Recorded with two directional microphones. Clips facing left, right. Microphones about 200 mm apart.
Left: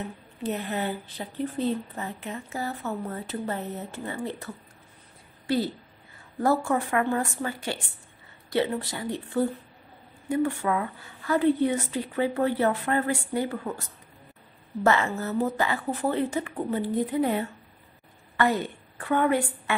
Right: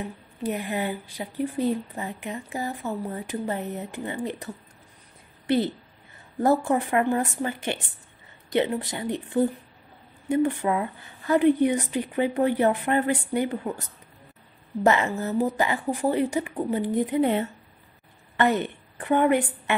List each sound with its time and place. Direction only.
0.0 s speech: 15° right (ahead or behind)
6.4 s a woman's voice: 20° right (ahead or behind)